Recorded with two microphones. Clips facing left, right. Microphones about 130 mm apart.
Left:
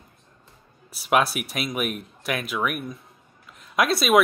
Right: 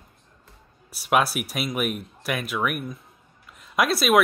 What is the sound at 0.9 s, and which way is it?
Speech, centre (ahead or behind).